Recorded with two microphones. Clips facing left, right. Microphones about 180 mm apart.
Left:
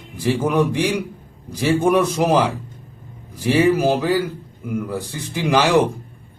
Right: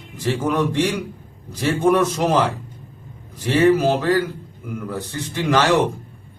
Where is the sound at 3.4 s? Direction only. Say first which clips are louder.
Even; 10° left (ahead or behind).